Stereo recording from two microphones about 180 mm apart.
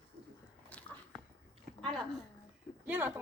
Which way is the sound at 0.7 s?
10° left (ahead or behind).